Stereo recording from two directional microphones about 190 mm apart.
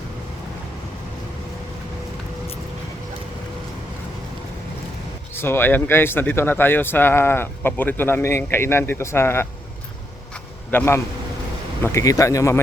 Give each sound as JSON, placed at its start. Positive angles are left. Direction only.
{"t": 5.3, "sound": "speech", "side_deg": 10}
{"t": 10.7, "sound": "speech", "side_deg": 10}